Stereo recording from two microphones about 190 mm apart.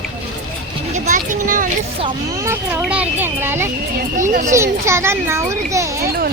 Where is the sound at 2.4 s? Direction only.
15° right (ahead or behind).